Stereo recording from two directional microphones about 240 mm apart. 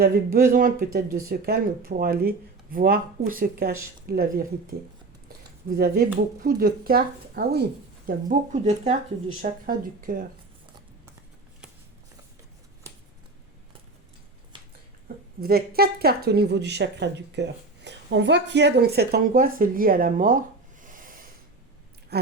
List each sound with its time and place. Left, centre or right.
0.0 s speech: right
5.7 s speech: right
15.4 s speech: right
20.8 s snort: right
22.1 s chewing: right